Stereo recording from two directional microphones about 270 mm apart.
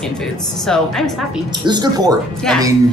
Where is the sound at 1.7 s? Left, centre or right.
Centre.